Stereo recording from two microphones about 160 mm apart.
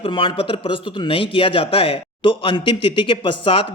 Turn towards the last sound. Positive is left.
turn(degrees=35)  # may be behind; listen again after turning